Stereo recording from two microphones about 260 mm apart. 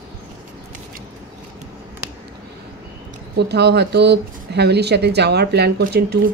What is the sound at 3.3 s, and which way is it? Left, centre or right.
Speech, right.